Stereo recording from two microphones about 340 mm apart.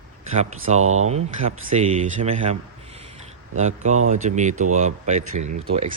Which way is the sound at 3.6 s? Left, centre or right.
Centre.